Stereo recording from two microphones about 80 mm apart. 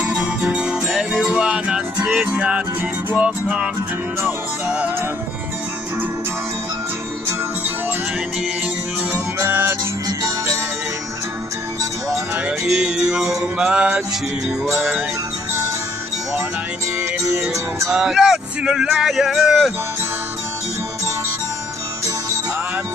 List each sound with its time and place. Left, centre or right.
0.0 s music: centre
3.3 s music: centre
9.1 s music: right
10.0 s music: right
12.6 s music: centre
17.9 s speech: centre